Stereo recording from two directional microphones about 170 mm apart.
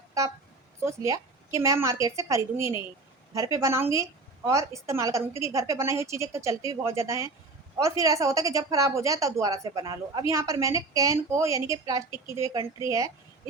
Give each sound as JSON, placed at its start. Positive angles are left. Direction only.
{"t": 0.8, "sound": "a woman's voice", "side_deg": -15}